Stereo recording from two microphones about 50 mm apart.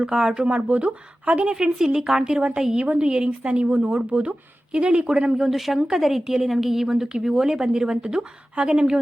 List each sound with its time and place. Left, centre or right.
0.0 s a woman's voice: centre
5.4 s a woman's voice: centre